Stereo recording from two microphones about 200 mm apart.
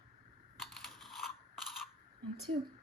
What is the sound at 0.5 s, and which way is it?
Crushing, centre (ahead or behind).